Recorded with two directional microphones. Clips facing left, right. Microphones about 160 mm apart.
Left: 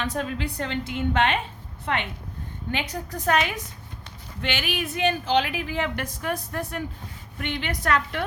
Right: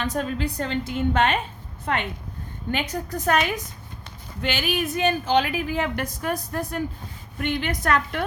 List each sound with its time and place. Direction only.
0.0 s a woman's voice: 40° right (ahead or behind)